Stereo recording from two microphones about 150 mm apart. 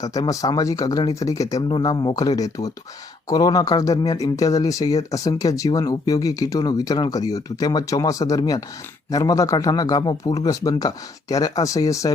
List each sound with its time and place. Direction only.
0.0 s speech: 25° left (ahead or behind)